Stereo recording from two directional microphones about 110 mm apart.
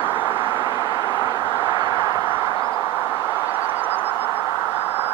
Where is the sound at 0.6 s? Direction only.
35° right (ahead or behind).